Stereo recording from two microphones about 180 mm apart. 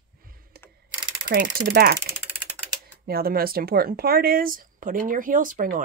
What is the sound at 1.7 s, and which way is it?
Speech, 55° right (ahead or behind).